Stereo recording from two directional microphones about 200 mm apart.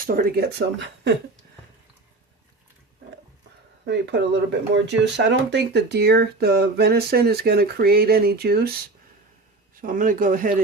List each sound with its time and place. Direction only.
0.0 s speech: 45° right (ahead or behind)
3.8 s speech: 55° right (ahead or behind)
9.8 s speech: 40° right (ahead or behind)